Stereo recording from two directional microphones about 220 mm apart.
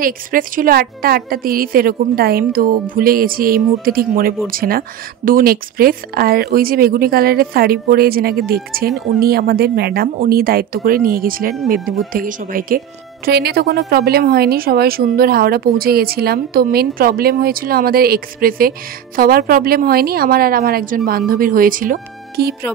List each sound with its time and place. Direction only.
0.0 s a woman's voice: 40° right (ahead or behind)
11.8 s speech: centre (ahead or behind)
12.1 s a woman's voice: 40° right (ahead or behind)